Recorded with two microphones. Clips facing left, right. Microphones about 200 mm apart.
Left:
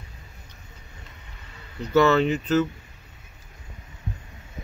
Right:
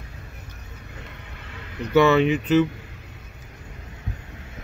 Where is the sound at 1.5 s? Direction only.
80° right.